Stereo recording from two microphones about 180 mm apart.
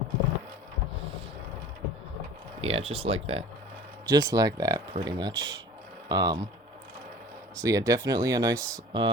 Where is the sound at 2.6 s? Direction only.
35° right (ahead or behind).